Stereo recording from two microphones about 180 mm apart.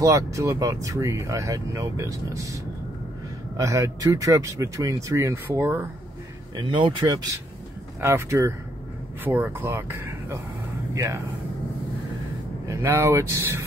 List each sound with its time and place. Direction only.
0.0 s speech: 15° right (ahead or behind)
6.5 s speech: 25° right (ahead or behind)
12.6 s speech: 15° right (ahead or behind)